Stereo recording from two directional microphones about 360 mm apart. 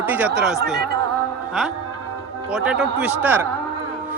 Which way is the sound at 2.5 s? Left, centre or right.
Centre.